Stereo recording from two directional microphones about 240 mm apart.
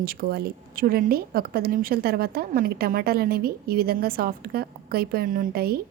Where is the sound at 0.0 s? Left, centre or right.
Right.